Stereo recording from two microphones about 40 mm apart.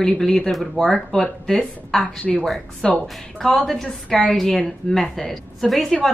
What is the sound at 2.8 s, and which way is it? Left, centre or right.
A woman's voice, centre.